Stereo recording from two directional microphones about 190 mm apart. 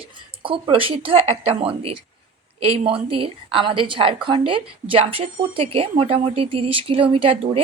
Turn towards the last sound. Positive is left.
turn(degrees=-30)  # may be behind; listen again after turning